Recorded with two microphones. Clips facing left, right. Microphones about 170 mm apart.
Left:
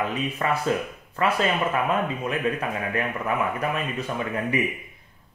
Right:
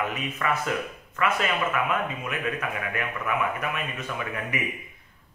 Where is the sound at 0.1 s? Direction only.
30° left (ahead or behind).